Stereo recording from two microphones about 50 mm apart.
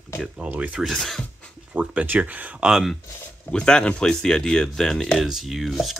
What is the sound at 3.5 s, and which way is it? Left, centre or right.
Speech, centre.